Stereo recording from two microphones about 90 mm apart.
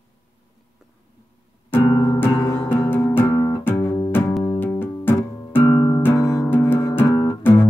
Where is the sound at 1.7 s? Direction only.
25° left (ahead or behind).